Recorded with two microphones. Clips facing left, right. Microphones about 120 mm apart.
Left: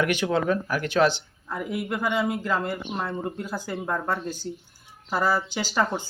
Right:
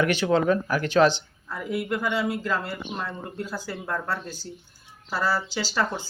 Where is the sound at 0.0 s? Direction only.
10° left (ahead or behind).